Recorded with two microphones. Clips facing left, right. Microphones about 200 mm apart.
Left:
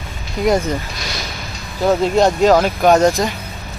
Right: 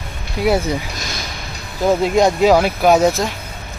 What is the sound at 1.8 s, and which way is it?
Speech, 10° right (ahead or behind).